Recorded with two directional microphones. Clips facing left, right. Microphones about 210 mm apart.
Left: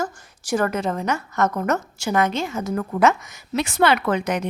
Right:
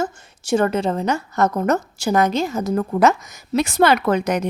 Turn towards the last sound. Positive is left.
turn(degrees=-40)  # may be behind; listen again after turning